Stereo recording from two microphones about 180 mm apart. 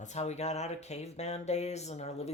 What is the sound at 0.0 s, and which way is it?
A woman's voice, 40° left (ahead or behind).